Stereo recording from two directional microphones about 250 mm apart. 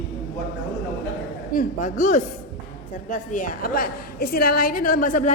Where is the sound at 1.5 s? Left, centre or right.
Left.